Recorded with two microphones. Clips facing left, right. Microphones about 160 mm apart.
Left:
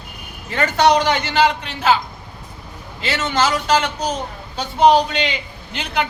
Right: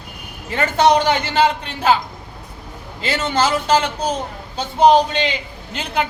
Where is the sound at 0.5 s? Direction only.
25° right (ahead or behind).